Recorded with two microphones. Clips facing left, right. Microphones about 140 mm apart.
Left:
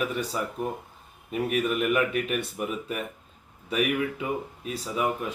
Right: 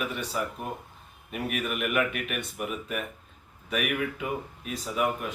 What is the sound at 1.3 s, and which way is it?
Speech, 30° left (ahead or behind).